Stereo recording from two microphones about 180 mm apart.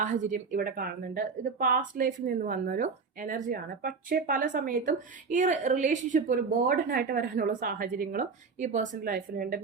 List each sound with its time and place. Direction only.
0.0 s speech: 45° right (ahead or behind)